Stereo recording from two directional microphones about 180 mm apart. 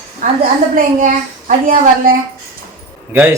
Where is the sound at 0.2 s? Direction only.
45° right (ahead or behind).